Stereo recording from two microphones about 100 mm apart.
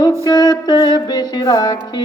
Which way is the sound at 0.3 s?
45° left (ahead or behind).